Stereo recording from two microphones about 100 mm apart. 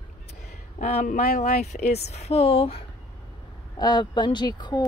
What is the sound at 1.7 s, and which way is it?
Speech, 90° left.